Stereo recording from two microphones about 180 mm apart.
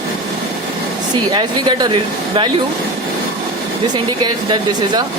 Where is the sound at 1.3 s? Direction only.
25° right (ahead or behind).